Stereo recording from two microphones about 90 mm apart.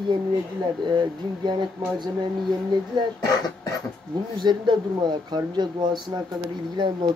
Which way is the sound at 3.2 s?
50° left (ahead or behind).